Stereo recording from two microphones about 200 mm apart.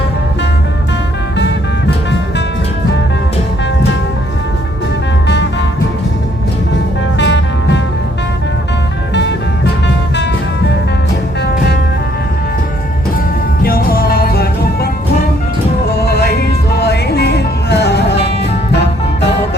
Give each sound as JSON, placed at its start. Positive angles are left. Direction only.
{"t": 7.2, "sound": "music", "side_deg": 60}
{"t": 13.6, "sound": "music", "side_deg": 50}
{"t": 16.0, "sound": "music", "side_deg": 55}